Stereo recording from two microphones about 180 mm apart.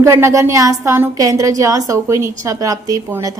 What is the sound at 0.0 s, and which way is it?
A woman's voice, 15° right (ahead or behind).